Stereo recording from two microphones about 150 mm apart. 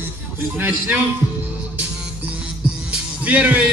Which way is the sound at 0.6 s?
15° right (ahead or behind).